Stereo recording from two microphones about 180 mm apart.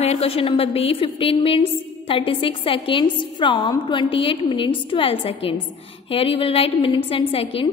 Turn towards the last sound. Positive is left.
turn(degrees=30)  # may be behind; listen again after turning